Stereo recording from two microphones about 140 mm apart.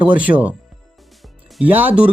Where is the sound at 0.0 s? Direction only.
10° right (ahead or behind).